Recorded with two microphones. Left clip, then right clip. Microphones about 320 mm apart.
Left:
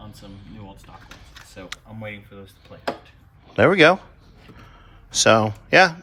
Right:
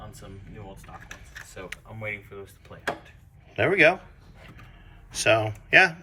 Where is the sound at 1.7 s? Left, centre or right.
Centre.